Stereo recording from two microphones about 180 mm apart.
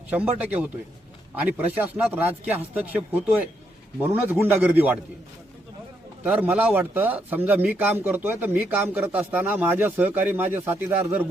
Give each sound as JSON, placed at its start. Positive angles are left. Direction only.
{"t": 0.1, "sound": "speech", "side_deg": -10}
{"t": 6.2, "sound": "speech", "side_deg": -10}